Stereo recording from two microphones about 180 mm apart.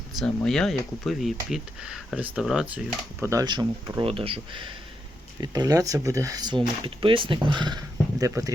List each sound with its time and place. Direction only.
0.2 s speech: centre (ahead or behind)
3.2 s speech: 15° right (ahead or behind)